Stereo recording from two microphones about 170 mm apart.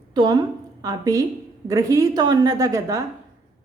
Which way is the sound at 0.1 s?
25° right (ahead or behind).